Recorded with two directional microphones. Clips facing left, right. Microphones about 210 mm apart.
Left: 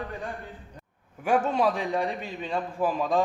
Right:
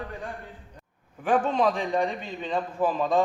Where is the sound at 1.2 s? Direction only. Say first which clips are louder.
Right 1 dB; 10° left (ahead or behind).